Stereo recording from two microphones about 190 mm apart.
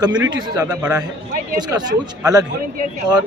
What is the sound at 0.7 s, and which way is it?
Speech, 5° right (ahead or behind).